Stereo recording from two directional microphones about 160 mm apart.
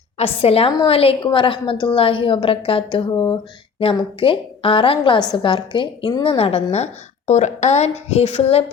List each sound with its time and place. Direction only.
0.2 s a woman's voice: 40° left (ahead or behind)